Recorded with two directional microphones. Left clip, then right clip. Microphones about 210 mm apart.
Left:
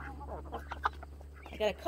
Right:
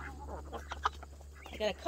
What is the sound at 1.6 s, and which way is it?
Speech, 50° left (ahead or behind).